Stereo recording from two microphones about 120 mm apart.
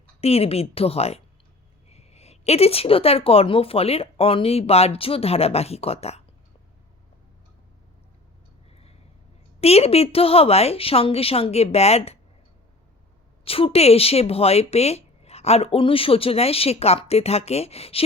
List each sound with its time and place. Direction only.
0.2 s speech: 55° left (ahead or behind)
8.7 s a sound: 55° left (ahead or behind)
9.6 s speech: 60° left (ahead or behind)
13.4 s speech: 50° left (ahead or behind)